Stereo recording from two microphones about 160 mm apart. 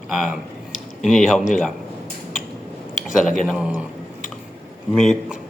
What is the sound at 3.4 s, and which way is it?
Speech, 5° right (ahead or behind).